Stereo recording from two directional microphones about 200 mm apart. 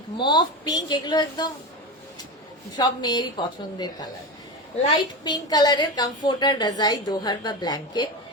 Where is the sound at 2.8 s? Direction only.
20° left (ahead or behind).